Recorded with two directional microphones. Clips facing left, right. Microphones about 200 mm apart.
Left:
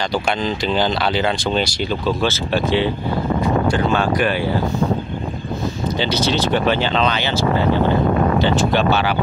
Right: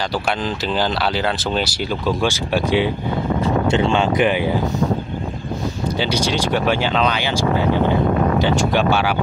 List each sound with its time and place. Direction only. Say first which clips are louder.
0.4 s speech: left 2 dB; 5° right (ahead or behind)
3.6 s speech: right 1 dB; 25° right (ahead or behind)
5.9 s speech: left 1 dB; 10° right (ahead or behind)